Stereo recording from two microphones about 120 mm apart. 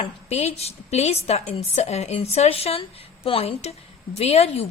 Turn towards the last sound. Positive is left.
turn(degrees=60)  # may be behind; listen again after turning